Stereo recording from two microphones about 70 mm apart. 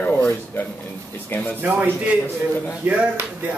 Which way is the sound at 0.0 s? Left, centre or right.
Left.